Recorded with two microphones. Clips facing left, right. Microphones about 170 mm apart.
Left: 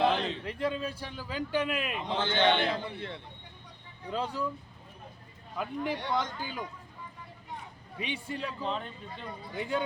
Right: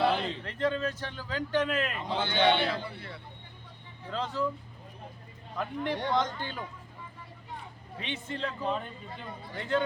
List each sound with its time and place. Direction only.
0.1 s a sound: centre (ahead or behind)
0.4 s speech: 10° left (ahead or behind)
2.1 s a man's voice: 10° right (ahead or behind)
2.6 s speech: 15° left (ahead or behind)
5.5 s a man's voice: 5° left (ahead or behind)
7.9 s speech: 10° left (ahead or behind)
8.6 s a man's voice: 5° right (ahead or behind)
9.6 s speech: 10° left (ahead or behind)